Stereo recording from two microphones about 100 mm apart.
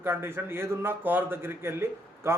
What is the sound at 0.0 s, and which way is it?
A man's voice, 25° right (ahead or behind).